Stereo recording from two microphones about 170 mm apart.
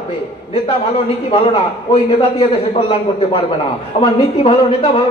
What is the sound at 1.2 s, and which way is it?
A man's voice, 35° left (ahead or behind).